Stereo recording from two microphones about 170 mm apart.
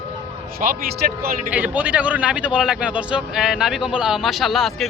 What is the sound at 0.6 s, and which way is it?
Speech, 55° right (ahead or behind).